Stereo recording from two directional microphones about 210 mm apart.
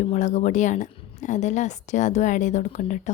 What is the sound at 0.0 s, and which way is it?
Speech, 35° left (ahead or behind).